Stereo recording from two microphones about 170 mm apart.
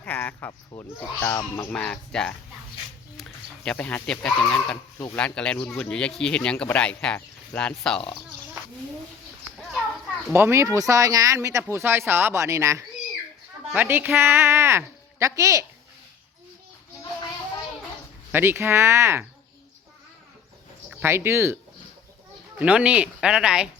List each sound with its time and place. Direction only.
0.0 s a sound: 10° left (ahead or behind)
0.8 s a man's voice: 15° left (ahead or behind)
10.3 s speech: 15° right (ahead or behind)
18.3 s speech: 10° right (ahead or behind)
20.9 s speech: 15° right (ahead or behind)